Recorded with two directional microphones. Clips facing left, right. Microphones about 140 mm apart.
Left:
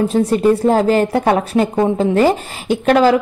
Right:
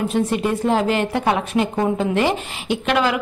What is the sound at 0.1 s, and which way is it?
A woman's voice, 35° left (ahead or behind).